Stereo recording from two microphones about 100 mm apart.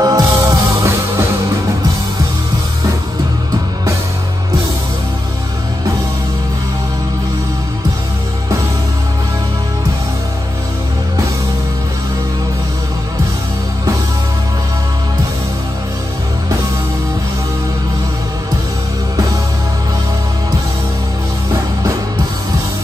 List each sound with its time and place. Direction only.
0.0 s music: 40° right (ahead or behind)
0.3 s music: 30° right (ahead or behind)